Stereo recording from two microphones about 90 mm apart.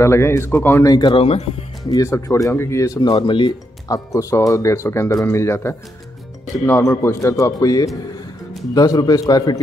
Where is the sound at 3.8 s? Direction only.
35° left (ahead or behind).